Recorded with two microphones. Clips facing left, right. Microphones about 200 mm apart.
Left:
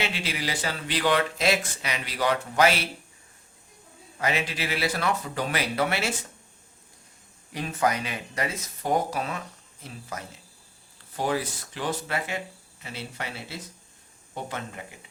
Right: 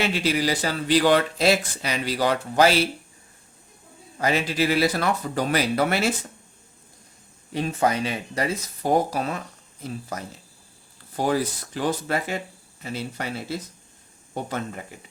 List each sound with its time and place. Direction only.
0.0 s speech: 40° right (ahead or behind)
4.2 s speech: 35° right (ahead or behind)
7.5 s speech: 30° right (ahead or behind)
11.2 s speech: 40° right (ahead or behind)